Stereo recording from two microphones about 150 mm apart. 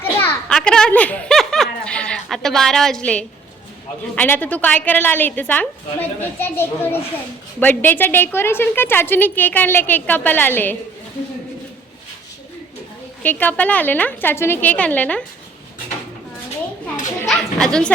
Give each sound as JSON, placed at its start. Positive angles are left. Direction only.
{"t": 0.2, "sound": "a sound", "side_deg": 15}
{"t": 0.5, "sound": "snicker", "side_deg": 5}
{"t": 4.1, "sound": "a woman's voice", "side_deg": 10}
{"t": 13.2, "sound": "a woman's voice", "side_deg": 10}
{"t": 17.2, "sound": "a woman's voice", "side_deg": 5}